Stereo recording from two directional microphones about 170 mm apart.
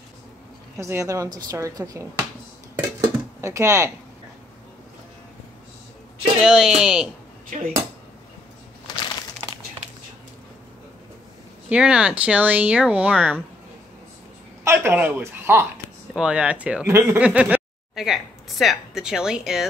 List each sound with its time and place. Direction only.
0.7 s a woman's voice: 15° right (ahead or behind)
3.0 s a sound: 15° right (ahead or behind)
6.4 s speech: 5° right (ahead or behind)
7.4 s speech: 50° right (ahead or behind)
11.7 s a woman's voice: 5° right (ahead or behind)
14.6 s speech: 15° right (ahead or behind)